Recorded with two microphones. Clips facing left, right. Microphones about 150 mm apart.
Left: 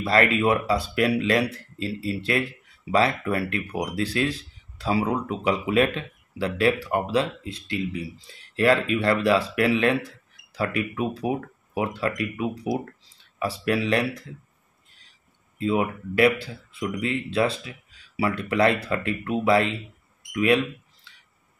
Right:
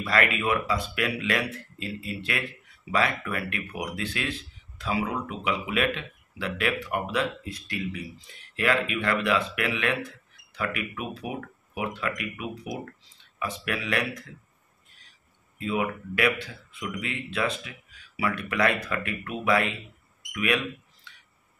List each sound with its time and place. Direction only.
0.0 s speech: 30° left (ahead or behind)
15.6 s speech: 30° left (ahead or behind)
20.3 s a sound: 30° left (ahead or behind)